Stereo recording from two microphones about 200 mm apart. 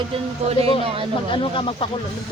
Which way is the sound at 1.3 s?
25° left (ahead or behind).